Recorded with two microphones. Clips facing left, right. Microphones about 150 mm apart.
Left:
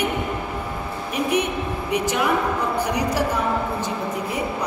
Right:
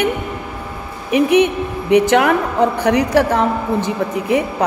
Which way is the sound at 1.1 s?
70° right (ahead or behind).